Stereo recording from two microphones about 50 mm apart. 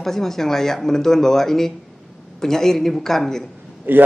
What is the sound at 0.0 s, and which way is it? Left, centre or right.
Speech, centre.